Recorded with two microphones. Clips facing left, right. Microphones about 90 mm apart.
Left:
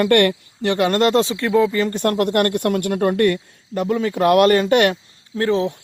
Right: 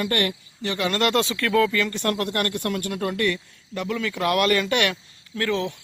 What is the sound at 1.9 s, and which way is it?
Speech, 45° left (ahead or behind).